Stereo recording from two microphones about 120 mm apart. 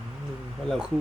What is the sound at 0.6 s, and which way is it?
Speech, 5° right (ahead or behind).